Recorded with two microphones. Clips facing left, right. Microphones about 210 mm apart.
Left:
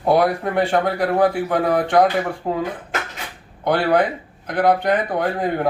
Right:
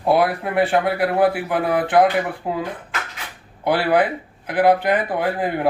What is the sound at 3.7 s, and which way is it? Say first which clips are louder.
Speech: even; 5° right (ahead or behind).